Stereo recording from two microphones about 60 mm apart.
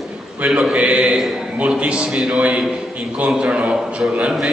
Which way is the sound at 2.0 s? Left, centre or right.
Centre.